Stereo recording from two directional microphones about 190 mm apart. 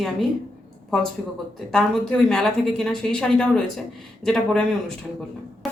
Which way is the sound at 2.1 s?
5° left (ahead or behind).